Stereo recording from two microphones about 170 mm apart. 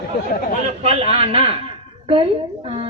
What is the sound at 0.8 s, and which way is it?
Speech, 35° right (ahead or behind).